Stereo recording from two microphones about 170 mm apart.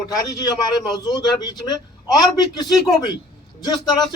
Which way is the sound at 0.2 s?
25° left (ahead or behind).